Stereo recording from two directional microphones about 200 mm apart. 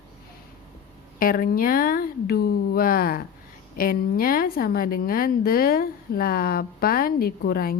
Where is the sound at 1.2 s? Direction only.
45° left (ahead or behind).